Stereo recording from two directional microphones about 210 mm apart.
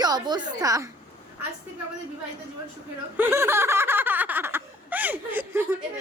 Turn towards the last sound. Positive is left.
turn(degrees=-10)  # may be behind; listen again after turning